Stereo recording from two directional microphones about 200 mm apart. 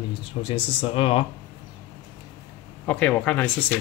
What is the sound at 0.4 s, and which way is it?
Speech, 25° left (ahead or behind).